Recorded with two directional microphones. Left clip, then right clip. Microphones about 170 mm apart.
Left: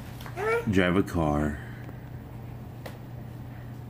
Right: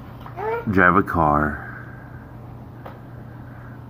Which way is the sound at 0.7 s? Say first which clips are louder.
Right 9 dB; 15° left (ahead or behind).